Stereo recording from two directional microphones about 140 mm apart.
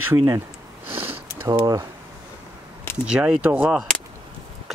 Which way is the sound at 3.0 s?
5° right (ahead or behind).